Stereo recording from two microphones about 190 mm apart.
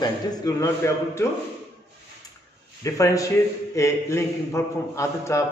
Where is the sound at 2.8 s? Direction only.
15° left (ahead or behind).